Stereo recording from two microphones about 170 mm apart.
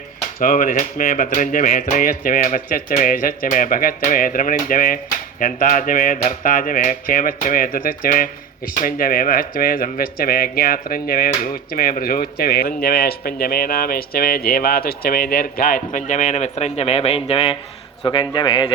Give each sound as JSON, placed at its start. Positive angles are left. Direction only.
{"t": 0.3, "sound": "a man's voice", "side_deg": 55}